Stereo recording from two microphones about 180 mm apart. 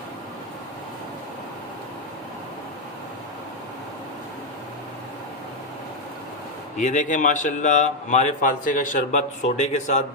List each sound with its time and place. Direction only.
6.7 s a man's voice: 45° left (ahead or behind)